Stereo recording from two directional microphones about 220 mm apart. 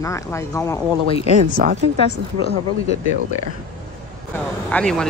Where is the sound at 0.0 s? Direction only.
15° left (ahead or behind).